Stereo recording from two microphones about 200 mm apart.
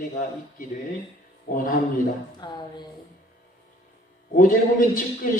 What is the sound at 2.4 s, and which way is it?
Speech, 20° left (ahead or behind).